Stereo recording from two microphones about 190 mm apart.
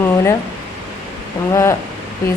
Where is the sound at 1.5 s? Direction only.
15° left (ahead or behind).